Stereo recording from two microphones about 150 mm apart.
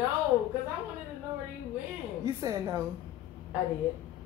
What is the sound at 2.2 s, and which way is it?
Speech, 25° right (ahead or behind).